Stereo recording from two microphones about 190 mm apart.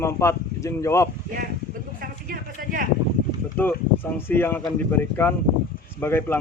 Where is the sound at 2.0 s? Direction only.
50° right (ahead or behind).